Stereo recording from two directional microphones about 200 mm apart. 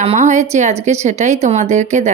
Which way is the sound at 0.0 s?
35° right (ahead or behind).